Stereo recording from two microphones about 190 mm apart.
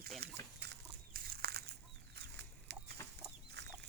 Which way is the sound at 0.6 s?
55° right (ahead or behind).